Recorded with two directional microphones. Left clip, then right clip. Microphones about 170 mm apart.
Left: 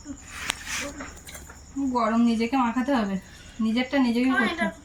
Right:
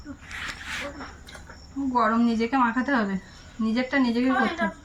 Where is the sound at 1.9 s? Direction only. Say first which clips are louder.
Right 2 dB; 15° left (ahead or behind).